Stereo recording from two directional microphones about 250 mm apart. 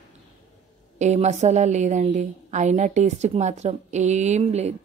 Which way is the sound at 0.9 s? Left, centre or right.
Right.